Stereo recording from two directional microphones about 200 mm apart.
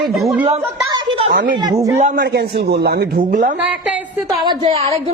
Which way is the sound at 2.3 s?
50° right (ahead or behind).